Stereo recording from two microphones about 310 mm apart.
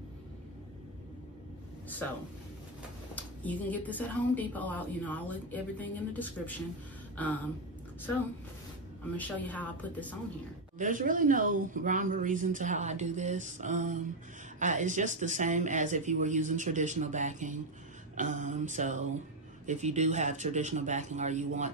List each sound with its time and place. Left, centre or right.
3.2 s a woman's voice: centre
9.1 s a woman's voice: centre
10.8 s speech: right